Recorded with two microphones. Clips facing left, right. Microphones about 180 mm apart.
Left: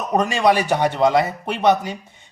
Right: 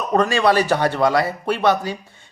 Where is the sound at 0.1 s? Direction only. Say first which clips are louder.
Right 1 dB; 15° left (ahead or behind).